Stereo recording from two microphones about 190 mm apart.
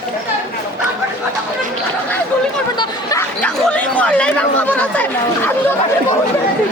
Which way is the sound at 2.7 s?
20° left (ahead or behind).